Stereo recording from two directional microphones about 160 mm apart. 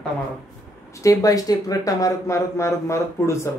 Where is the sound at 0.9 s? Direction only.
20° left (ahead or behind).